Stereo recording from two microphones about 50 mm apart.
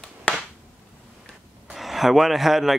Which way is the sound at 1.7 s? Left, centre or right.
Centre.